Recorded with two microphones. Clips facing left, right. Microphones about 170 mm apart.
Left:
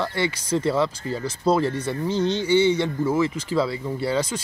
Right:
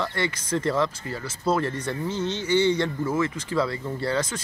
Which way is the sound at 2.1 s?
35° left (ahead or behind).